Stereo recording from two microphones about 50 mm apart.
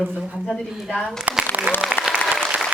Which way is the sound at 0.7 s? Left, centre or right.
Centre.